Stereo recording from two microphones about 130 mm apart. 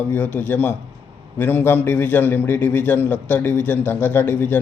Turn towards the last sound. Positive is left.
turn(degrees=15)  # may be behind; listen again after turning